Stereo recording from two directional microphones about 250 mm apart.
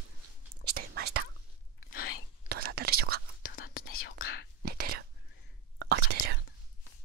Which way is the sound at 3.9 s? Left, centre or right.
Left.